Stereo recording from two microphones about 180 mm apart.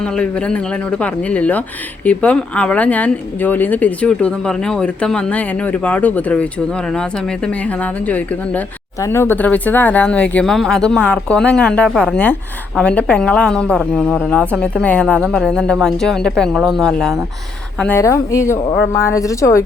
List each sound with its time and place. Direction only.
0.0 s speech: 5° left (ahead or behind)